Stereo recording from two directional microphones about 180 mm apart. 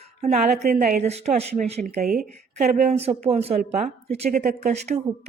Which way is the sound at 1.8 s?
55° right (ahead or behind).